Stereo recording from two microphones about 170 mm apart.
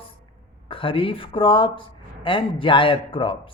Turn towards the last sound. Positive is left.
turn(degrees=30)  # may be behind; listen again after turning